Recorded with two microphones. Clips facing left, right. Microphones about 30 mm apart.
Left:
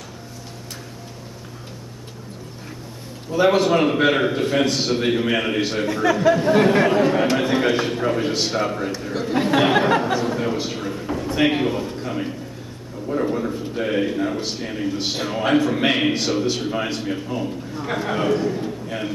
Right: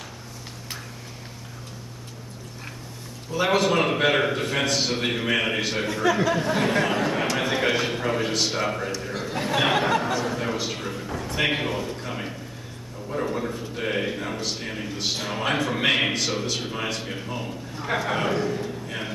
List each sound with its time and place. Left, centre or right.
3.5 s a man's voice: centre
4.9 s a man's voice: centre
6.4 s a man's voice: centre
8.2 s speech: centre
8.5 s a man's voice: centre
9.3 s speech: centre
10.4 s a man's voice: centre
11.7 s a man's voice: centre
13.1 s a sound: centre
13.7 s speech: centre
15.0 s speech: centre
15.2 s a man's voice: centre
16.1 s speech: centre
16.5 s a man's voice: centre